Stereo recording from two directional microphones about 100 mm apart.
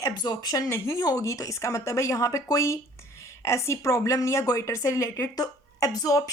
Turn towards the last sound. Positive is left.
turn(degrees=35)  # may be behind; listen again after turning